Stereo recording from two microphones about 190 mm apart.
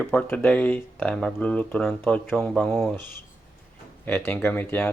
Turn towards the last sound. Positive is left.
turn(degrees=10)  # may be behind; listen again after turning